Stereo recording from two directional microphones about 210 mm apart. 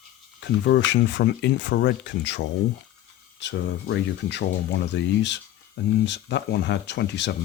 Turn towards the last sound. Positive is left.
turn(degrees=55)  # may be behind; listen again after turning